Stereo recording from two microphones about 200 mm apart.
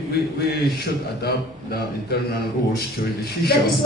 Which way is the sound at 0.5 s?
50° left (ahead or behind).